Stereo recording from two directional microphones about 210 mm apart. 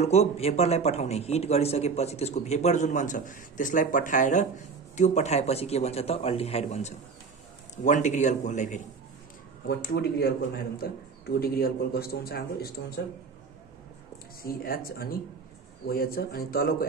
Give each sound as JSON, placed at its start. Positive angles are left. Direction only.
{"t": 0.0, "sound": "a man's voice", "side_deg": 30}
{"t": 9.7, "sound": "a man's voice", "side_deg": 50}
{"t": 14.1, "sound": "a man's voice", "side_deg": 45}